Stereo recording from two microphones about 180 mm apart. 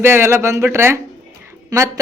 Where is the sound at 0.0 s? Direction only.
15° right (ahead or behind).